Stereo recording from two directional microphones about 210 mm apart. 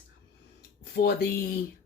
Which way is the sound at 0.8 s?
50° left (ahead or behind).